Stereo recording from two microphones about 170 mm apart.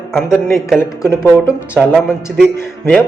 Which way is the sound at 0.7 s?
15° left (ahead or behind).